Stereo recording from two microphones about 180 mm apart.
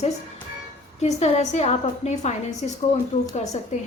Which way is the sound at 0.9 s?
40° left (ahead or behind).